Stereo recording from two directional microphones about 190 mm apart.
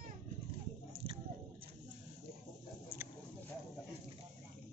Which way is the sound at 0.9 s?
30° right (ahead or behind).